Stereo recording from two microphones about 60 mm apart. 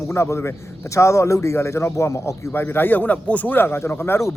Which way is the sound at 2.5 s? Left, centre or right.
Left.